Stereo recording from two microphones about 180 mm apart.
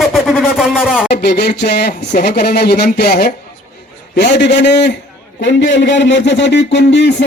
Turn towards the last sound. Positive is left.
turn(degrees=80)